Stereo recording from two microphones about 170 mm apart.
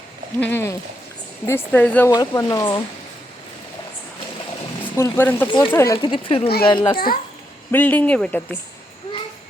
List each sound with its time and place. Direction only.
0.3 s speech: 10° left (ahead or behind)
4.9 s speech: 15° left (ahead or behind)
5.5 s a child's voice: 30° left (ahead or behind)
5.7 s speech: 15° left (ahead or behind)
6.0 s a child's voice: 30° left (ahead or behind)
7.7 s speech: 10° left (ahead or behind)